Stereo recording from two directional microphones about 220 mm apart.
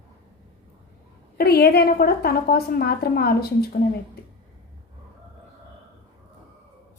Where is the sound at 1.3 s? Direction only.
45° left (ahead or behind).